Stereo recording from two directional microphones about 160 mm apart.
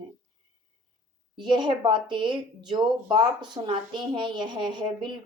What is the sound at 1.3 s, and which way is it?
Speech, 30° right (ahead or behind).